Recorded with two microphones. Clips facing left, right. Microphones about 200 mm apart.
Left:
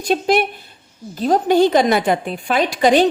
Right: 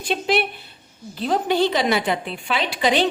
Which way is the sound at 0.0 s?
45° left (ahead or behind).